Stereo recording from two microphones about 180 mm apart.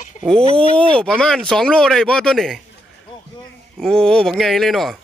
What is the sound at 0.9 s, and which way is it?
Speech, 5° left (ahead or behind).